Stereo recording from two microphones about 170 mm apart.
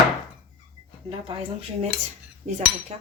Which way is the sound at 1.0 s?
30° right (ahead or behind).